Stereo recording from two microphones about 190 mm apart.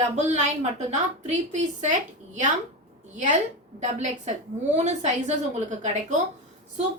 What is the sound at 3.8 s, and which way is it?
A woman's voice, 40° right (ahead or behind).